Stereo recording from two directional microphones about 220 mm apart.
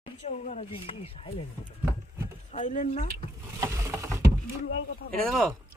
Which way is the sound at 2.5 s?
35° left (ahead or behind).